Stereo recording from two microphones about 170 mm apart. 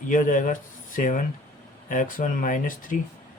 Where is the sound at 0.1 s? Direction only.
50° left (ahead or behind).